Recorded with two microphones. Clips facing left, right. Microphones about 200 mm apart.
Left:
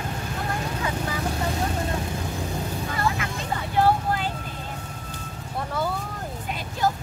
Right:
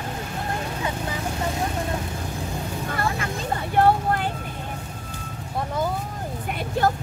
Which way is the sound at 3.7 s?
55° right (ahead or behind).